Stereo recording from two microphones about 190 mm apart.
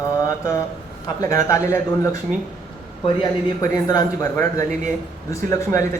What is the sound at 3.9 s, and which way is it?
A man's voice, 20° left (ahead or behind).